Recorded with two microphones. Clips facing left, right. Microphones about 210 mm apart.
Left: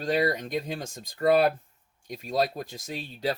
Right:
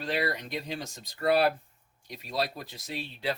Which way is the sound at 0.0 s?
45° left (ahead or behind).